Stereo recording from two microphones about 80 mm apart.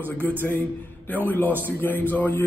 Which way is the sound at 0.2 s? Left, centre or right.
Left.